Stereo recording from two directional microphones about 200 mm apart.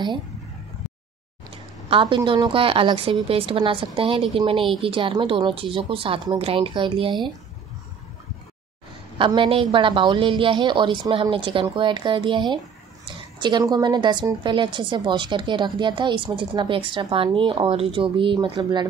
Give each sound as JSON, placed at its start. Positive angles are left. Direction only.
{"t": 1.5, "sound": "a woman's voice", "side_deg": -25}
{"t": 9.2, "sound": "a woman's voice", "side_deg": -25}